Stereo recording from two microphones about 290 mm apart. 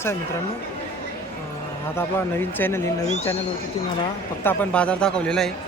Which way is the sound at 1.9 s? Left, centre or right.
Centre.